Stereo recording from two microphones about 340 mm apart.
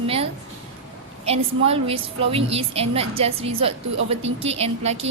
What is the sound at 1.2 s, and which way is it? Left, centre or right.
A woman's voice, centre.